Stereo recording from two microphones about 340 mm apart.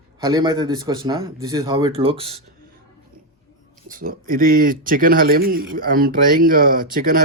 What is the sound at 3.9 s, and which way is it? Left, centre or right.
Speech, right.